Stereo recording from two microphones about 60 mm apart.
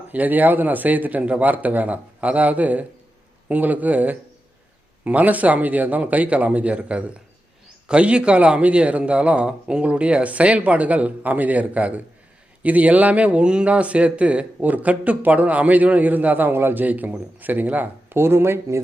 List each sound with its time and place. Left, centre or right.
0.1 s speech: right
18.2 s speech: right